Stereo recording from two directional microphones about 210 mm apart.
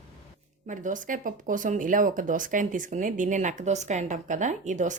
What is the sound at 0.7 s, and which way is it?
Speech, 40° right (ahead or behind).